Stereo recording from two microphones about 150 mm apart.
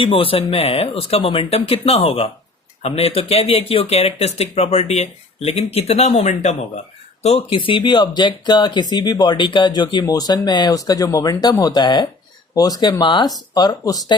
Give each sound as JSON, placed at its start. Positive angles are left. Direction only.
{"t": 0.0, "sound": "speech", "side_deg": 35}